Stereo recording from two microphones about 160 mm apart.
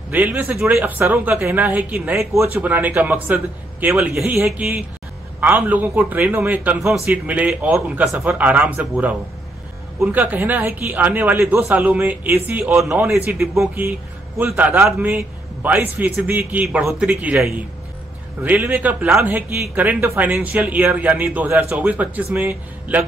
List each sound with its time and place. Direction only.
0.1 s a man's voice: 10° right (ahead or behind)
13.4 s speech: centre (ahead or behind)
14.4 s a man's voice: 10° right (ahead or behind)